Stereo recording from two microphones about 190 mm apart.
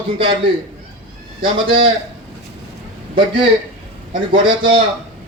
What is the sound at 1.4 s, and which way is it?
Speech, 25° right (ahead or behind).